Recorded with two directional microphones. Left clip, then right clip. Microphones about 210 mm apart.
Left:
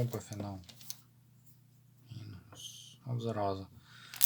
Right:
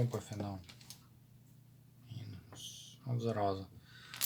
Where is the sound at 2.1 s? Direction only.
15° left (ahead or behind).